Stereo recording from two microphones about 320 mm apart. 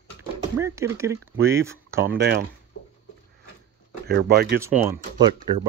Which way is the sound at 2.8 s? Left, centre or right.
Left.